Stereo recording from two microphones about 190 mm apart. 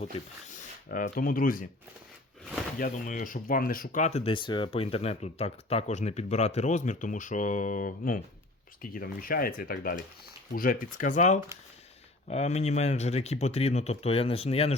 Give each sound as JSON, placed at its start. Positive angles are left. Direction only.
{"t": 0.9, "sound": "speech", "side_deg": 50}
{"t": 2.7, "sound": "speech", "side_deg": 50}